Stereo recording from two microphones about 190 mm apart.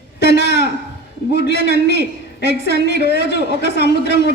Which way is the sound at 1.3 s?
60° left (ahead or behind).